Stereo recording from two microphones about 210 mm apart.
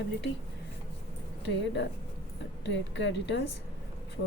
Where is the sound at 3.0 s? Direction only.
55° left (ahead or behind).